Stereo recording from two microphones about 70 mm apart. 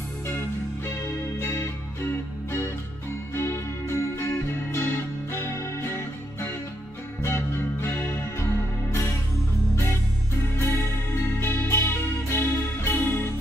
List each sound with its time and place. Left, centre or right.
0.3 s music: left
3.3 s music: left
10.6 s music: left